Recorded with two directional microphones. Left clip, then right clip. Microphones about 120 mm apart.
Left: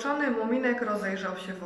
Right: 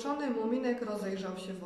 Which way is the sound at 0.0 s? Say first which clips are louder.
Left 6 dB; 35° right (ahead or behind).